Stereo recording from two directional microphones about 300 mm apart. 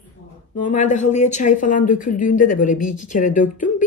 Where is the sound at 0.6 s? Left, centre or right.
Left.